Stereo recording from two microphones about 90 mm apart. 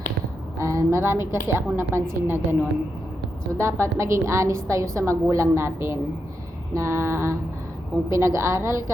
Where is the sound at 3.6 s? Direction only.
30° right (ahead or behind).